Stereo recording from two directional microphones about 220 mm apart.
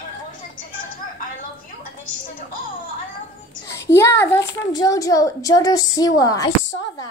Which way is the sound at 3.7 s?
10° left (ahead or behind).